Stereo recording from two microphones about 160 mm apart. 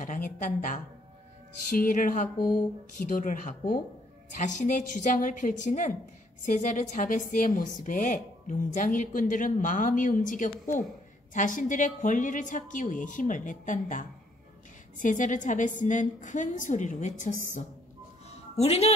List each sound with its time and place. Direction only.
0.0 s a woman's voice: 50° left (ahead or behind)